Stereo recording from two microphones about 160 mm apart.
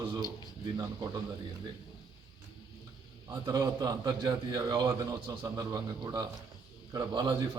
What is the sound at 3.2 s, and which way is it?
A man's voice, 20° right (ahead or behind).